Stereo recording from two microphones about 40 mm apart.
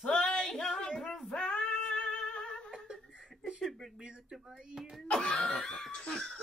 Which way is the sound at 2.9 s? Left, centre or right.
Centre.